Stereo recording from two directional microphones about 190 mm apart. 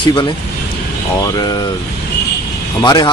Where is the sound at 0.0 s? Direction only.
20° left (ahead or behind).